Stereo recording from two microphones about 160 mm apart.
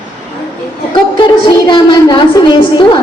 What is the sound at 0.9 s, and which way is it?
A woman's voice, 30° left (ahead or behind).